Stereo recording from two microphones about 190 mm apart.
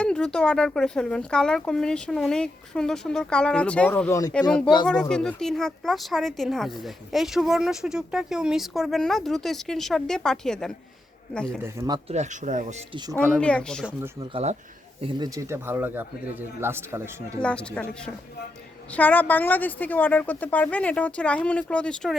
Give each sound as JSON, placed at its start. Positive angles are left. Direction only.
{"t": 0.0, "sound": "speech", "side_deg": 5}
{"t": 11.6, "sound": "speech", "side_deg": -15}
{"t": 12.0, "sound": "speech", "side_deg": -35}
{"t": 13.4, "sound": "speech", "side_deg": 5}
{"t": 15.0, "sound": "speech", "side_deg": -20}
{"t": 17.4, "sound": "a woman's voice", "side_deg": 5}